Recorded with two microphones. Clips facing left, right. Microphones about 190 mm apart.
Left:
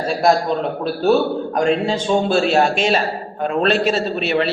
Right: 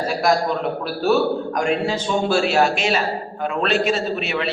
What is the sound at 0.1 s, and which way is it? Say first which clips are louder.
A man's voice: left 4 dB; 30° left (ahead or behind).